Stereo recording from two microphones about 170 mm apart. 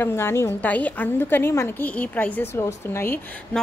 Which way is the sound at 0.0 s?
15° left (ahead or behind).